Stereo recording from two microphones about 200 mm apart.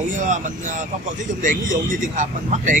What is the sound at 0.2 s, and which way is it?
Speech, 40° right (ahead or behind).